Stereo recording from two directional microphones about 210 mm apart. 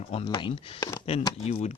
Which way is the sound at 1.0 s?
25° left (ahead or behind).